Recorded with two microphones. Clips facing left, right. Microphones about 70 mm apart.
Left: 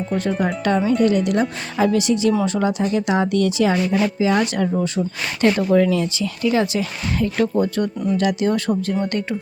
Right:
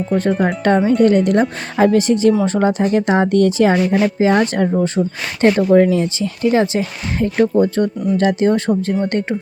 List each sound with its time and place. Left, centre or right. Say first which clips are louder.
0.3 s a woman's voice: right 4 dB; right